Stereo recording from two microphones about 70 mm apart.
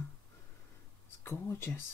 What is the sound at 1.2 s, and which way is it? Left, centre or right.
Speech, left.